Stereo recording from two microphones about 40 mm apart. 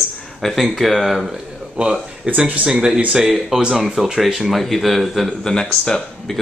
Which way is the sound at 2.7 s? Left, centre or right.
Centre.